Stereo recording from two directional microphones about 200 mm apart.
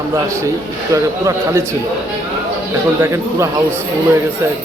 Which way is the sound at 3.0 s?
15° right (ahead or behind).